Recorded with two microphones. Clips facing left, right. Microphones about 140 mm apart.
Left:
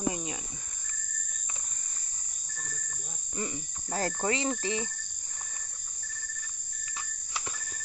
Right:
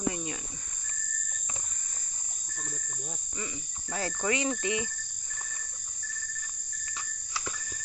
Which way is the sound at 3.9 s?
45° left (ahead or behind).